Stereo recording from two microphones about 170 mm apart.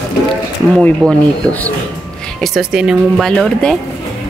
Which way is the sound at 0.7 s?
5° left (ahead or behind).